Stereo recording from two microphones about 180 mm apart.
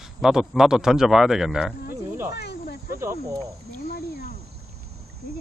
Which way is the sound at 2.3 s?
60° left (ahead or behind).